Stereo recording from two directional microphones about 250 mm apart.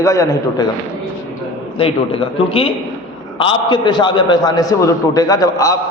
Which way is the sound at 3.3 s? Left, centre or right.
Centre.